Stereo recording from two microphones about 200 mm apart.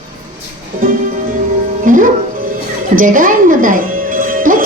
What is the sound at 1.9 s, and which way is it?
Music, 40° right (ahead or behind).